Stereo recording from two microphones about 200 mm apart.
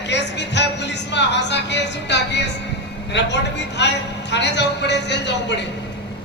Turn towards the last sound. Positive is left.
turn(degrees=60)  # may be behind; listen again after turning